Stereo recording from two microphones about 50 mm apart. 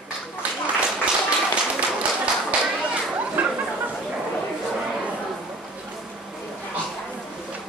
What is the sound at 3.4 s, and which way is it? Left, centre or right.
Chatter, right.